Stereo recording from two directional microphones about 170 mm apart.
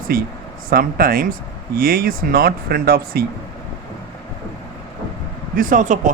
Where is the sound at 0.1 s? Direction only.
60° right (ahead or behind).